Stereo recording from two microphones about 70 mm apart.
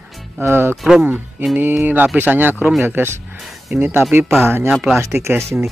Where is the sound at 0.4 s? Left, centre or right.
Right.